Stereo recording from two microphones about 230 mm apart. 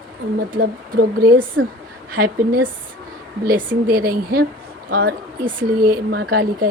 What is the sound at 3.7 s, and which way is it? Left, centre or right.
Speech, right.